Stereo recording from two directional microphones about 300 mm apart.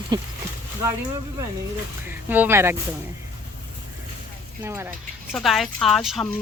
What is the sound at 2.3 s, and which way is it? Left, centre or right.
Speech, centre.